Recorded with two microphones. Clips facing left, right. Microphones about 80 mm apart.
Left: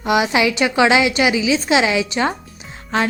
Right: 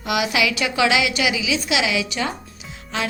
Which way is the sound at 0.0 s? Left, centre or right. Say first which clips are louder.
Left 5 dB; left.